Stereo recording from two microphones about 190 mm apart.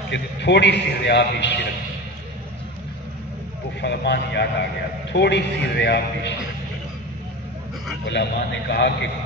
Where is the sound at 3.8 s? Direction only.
65° left (ahead or behind).